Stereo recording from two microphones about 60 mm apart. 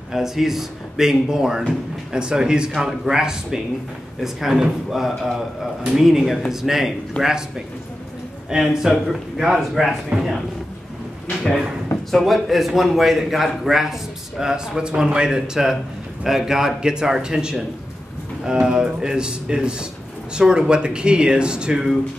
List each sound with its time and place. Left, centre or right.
0.1 s a man's voice: centre
12.1 s a man's voice: centre